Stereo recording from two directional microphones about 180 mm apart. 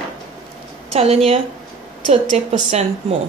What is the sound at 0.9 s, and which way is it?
Speech, 35° right (ahead or behind).